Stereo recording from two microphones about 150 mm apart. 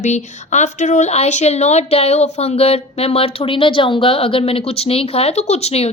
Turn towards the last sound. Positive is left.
turn(degrees=45)  # may be behind; listen again after turning